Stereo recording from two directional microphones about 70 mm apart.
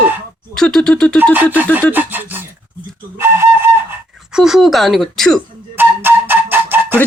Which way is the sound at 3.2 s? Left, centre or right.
Right.